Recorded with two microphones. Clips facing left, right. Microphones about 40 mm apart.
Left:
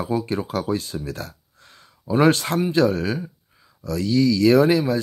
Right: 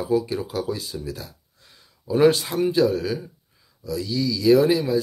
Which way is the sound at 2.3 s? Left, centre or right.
Left.